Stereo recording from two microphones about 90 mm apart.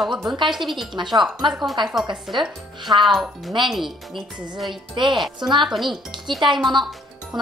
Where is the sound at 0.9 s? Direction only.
60° right (ahead or behind).